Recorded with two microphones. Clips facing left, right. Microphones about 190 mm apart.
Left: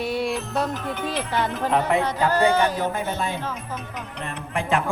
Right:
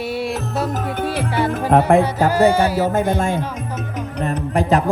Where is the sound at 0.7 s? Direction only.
45° right (ahead or behind).